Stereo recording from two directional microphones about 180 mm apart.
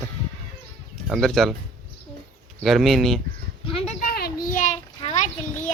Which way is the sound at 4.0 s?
60° left (ahead or behind).